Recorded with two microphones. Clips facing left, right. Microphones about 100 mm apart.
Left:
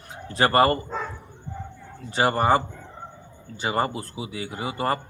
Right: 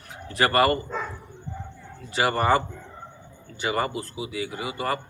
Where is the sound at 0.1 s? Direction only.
30° left (ahead or behind).